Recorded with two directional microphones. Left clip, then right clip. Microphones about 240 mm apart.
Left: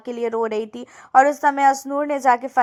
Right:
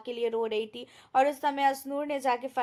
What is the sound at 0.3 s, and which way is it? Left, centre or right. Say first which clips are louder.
Speech: left 8 dB; left.